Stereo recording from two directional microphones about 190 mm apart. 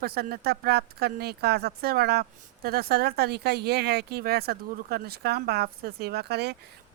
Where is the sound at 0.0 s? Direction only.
55° right (ahead or behind).